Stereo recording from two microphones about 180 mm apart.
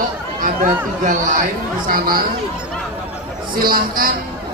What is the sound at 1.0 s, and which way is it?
Speech, 45° right (ahead or behind).